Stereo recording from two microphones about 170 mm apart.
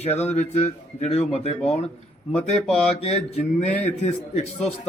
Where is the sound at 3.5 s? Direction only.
40° left (ahead or behind).